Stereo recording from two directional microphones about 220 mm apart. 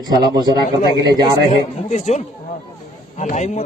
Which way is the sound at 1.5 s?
30° left (ahead or behind).